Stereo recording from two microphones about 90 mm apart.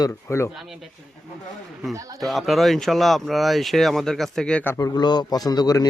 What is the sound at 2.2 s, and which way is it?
Speech, centre (ahead or behind).